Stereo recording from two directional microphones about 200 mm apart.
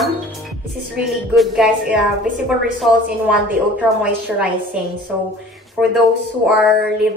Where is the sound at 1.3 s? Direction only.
Centre (ahead or behind).